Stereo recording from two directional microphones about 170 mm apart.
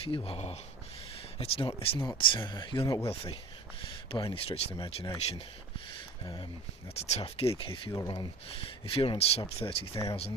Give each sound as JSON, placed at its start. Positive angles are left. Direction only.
{"t": 0.0, "sound": "speech", "side_deg": 35}
{"t": 4.1, "sound": "speech", "side_deg": 30}
{"t": 6.9, "sound": "speech", "side_deg": 35}